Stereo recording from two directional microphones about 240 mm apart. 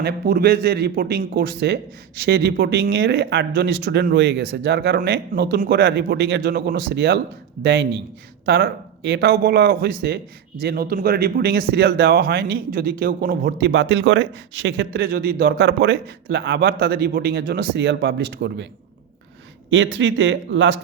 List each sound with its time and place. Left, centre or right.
0.0 s speech: right
19.7 s speech: right